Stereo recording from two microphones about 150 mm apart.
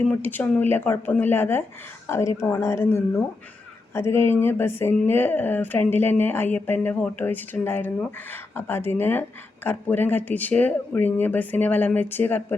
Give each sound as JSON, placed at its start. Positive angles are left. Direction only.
{"t": 0.1, "sound": "speech", "side_deg": 10}